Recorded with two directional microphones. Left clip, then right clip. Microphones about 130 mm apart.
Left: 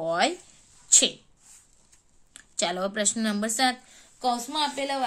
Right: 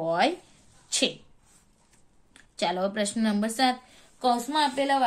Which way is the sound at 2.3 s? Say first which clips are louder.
Right 1 dB; 35° left (ahead or behind).